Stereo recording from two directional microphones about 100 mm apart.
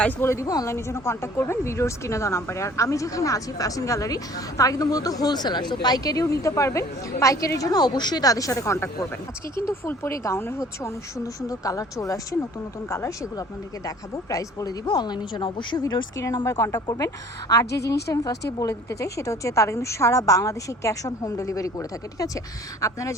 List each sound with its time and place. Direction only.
0.2 s a woman's voice: 30° left (ahead or behind); by 15.8 s 55° left (ahead or behind)
16.2 s speech: 40° left (ahead or behind)